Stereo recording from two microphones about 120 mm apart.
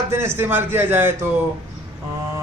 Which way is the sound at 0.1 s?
20° right (ahead or behind).